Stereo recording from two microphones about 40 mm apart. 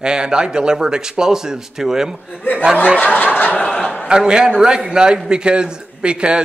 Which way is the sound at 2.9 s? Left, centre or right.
Left.